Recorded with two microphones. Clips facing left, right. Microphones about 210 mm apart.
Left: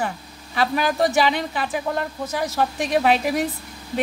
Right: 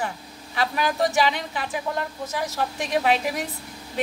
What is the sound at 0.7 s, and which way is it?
Speech, 55° left (ahead or behind).